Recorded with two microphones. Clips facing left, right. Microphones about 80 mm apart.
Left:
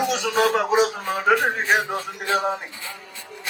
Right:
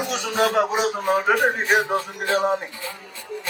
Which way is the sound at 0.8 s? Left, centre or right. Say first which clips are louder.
Right 1 dB; right.